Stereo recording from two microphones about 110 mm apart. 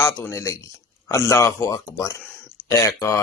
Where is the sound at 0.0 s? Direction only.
25° left (ahead or behind).